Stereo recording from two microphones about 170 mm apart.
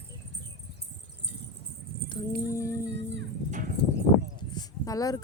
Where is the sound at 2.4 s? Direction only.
15° left (ahead or behind).